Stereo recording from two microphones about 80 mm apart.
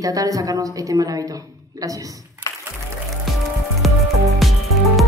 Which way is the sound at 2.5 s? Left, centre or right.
Left.